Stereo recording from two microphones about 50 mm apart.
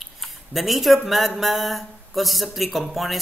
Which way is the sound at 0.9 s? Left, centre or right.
Centre.